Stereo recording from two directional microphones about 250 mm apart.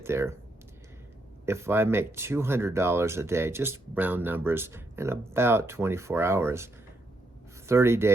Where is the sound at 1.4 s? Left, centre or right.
Centre.